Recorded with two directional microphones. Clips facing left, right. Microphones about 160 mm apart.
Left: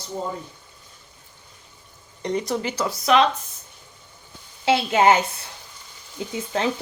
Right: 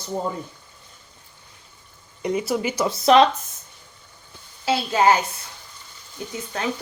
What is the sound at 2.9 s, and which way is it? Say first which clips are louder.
Speech: right 4 dB; 35° right (ahead or behind).